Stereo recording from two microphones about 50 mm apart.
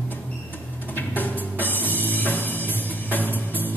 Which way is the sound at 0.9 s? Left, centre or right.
Left.